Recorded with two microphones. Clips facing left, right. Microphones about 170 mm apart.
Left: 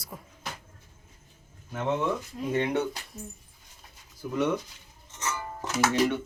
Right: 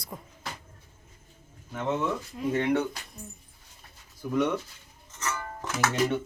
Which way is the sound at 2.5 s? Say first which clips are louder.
Right 1 dB; 15° left (ahead or behind).